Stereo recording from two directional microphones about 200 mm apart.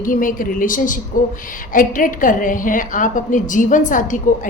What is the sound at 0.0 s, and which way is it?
A woman's voice, 45° left (ahead or behind).